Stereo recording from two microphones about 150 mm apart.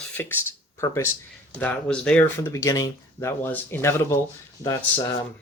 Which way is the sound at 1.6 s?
10° left (ahead or behind).